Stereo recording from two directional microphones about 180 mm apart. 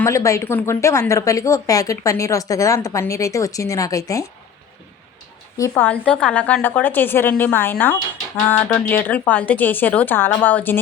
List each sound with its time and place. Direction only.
0.0 s speech: 15° left (ahead or behind)
5.5 s speech: 15° left (ahead or behind)